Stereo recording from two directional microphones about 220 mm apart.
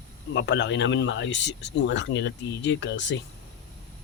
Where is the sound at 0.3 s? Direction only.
55° left (ahead or behind).